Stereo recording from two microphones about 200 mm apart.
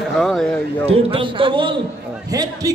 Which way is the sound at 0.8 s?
30° right (ahead or behind).